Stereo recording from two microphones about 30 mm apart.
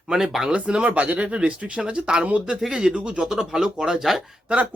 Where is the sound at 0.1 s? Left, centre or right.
Centre.